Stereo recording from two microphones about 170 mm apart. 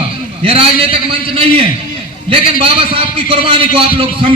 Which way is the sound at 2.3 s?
35° right (ahead or behind).